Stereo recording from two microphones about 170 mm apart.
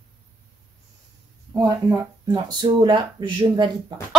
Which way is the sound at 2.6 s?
25° right (ahead or behind).